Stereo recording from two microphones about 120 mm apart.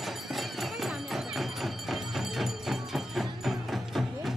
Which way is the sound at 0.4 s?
Centre (ahead or behind).